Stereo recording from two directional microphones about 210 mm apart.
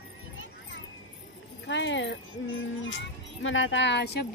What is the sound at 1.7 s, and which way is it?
Speech, 60° left (ahead or behind).